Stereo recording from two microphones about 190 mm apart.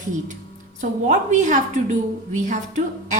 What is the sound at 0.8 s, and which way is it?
A woman's voice, 40° right (ahead or behind).